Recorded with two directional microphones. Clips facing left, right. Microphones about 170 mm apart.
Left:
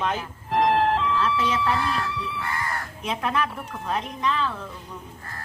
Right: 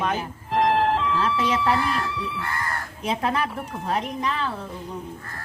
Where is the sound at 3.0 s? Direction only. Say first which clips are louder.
Right 2 dB; 35° right (ahead or behind).